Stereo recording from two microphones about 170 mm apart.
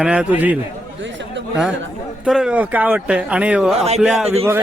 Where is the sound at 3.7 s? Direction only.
35° right (ahead or behind).